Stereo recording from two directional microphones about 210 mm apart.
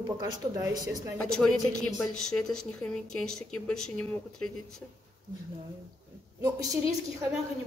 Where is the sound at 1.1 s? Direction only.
5° left (ahead or behind).